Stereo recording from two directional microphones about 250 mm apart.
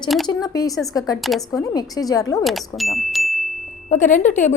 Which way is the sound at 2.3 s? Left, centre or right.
Centre.